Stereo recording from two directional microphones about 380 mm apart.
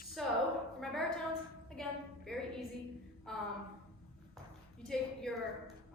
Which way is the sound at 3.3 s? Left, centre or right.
Centre.